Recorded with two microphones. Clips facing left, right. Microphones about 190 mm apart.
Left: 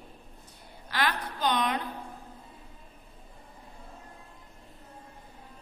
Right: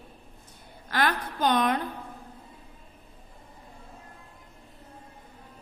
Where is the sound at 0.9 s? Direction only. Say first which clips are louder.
Right 3 dB; 50° right (ahead or behind).